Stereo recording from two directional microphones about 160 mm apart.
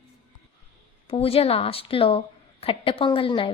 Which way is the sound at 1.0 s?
35° left (ahead or behind).